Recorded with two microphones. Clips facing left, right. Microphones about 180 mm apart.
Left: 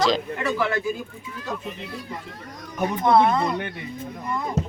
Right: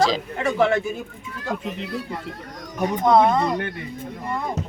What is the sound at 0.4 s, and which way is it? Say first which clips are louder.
Speech: right 6 dB; 25° right (ahead or behind).